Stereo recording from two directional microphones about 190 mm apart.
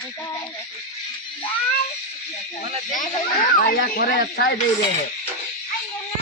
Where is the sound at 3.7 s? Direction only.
50° left (ahead or behind).